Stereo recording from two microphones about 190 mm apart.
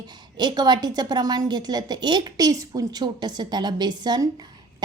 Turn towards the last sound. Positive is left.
turn(degrees=-20)  # may be behind; listen again after turning